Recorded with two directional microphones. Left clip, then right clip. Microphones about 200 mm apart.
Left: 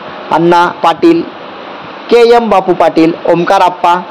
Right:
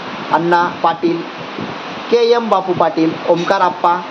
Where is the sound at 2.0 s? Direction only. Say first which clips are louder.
Left 7 dB; 40° left (ahead or behind).